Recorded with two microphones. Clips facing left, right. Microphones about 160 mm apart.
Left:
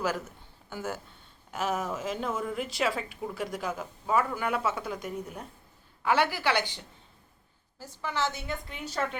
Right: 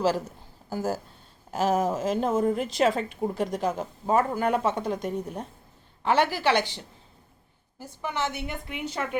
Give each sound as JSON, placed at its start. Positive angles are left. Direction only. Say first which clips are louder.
{"t": 0.0, "sound": "a woman's voice", "louder": "right 6 dB", "side_deg": -35}
{"t": 6.2, "sound": "a woman's voice", "louder": "right 4 dB", "side_deg": -15}
{"t": 7.8, "sound": "a woman's voice", "louder": "right 1 dB", "side_deg": -20}